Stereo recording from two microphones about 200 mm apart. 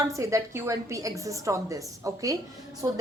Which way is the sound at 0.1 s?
15° right (ahead or behind).